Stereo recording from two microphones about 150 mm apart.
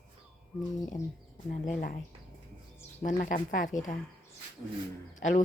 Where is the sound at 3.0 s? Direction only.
60° left (ahead or behind).